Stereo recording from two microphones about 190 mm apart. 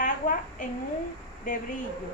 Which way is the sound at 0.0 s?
45° left (ahead or behind).